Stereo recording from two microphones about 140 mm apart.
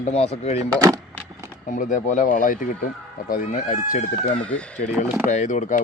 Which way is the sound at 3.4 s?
70° left (ahead or behind).